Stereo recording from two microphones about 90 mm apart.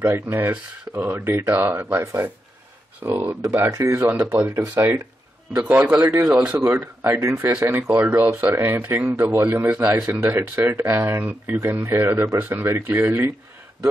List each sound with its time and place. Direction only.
0.0 s speech: 20° right (ahead or behind)
4.0 s speech: 20° right (ahead or behind)
5.6 s speech: 15° right (ahead or behind)
7.0 s speech: 35° right (ahead or behind)